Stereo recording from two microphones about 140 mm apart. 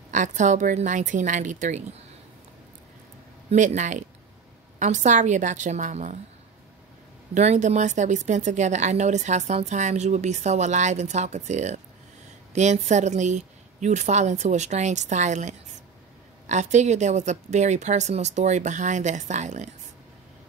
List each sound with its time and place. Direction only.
0.1 s speech: 60° right (ahead or behind)
3.4 s speech: 60° right (ahead or behind)
7.3 s speech: 55° right (ahead or behind)